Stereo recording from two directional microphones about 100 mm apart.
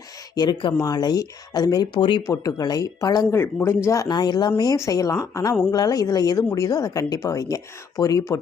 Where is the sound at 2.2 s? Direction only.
35° left (ahead or behind).